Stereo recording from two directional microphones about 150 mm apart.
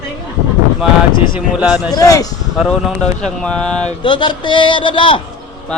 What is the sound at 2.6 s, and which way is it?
Speech, centre (ahead or behind).